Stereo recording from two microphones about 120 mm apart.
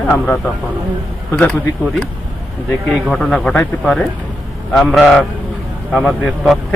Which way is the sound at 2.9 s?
5° left (ahead or behind).